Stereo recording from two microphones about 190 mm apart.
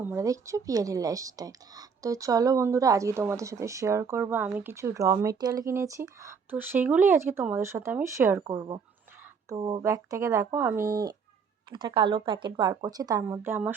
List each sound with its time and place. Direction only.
0.0 s speech: 15° right (ahead or behind)